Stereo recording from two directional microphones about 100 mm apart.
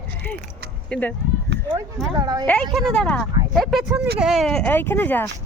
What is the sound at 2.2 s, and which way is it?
Speech, 40° right (ahead or behind).